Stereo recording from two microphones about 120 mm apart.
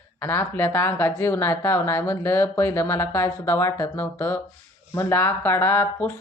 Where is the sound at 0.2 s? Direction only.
20° left (ahead or behind).